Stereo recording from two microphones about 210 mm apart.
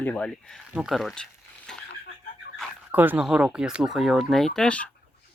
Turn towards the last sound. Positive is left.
turn(degrees=5)  # may be behind; listen again after turning